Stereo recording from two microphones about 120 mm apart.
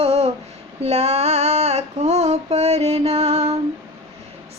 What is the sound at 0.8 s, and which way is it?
Female singing, 60° right (ahead or behind).